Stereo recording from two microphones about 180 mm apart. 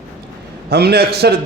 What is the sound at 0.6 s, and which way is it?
Speech, 60° right (ahead or behind).